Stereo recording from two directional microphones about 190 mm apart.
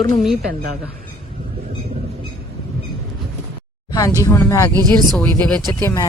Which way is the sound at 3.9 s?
20° left (ahead or behind).